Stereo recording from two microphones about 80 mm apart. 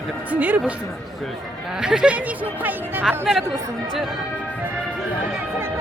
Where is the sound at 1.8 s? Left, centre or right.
Centre.